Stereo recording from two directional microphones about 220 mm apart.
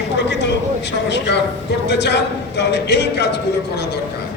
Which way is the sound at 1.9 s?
50° left (ahead or behind).